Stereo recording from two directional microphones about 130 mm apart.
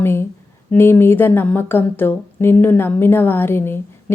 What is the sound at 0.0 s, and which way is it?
A woman's voice, 20° left (ahead or behind).